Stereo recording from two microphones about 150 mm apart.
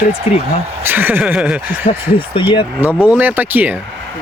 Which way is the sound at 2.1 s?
35° left (ahead or behind).